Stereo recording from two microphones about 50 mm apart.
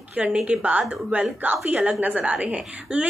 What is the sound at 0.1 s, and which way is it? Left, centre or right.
A woman's voice, right.